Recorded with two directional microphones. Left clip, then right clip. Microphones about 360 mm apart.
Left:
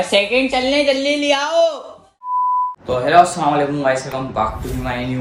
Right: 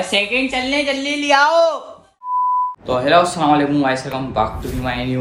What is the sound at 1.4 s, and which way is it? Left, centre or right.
Speech, right.